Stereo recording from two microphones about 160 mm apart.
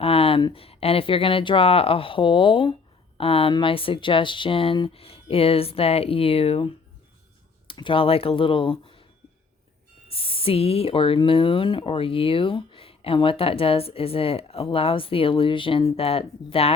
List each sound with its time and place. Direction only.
0.0 s speech: 35° left (ahead or behind)
10.1 s speech: 35° left (ahead or behind)